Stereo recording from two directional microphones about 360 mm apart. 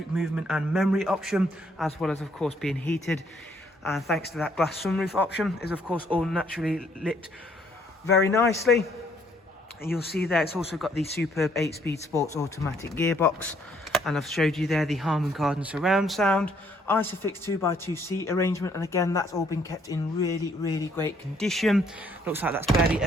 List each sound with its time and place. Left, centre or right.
0.2 s speech: centre
8.3 s speech: centre
10.2 s speech: centre
11.0 s speech: left
11.3 s speech: centre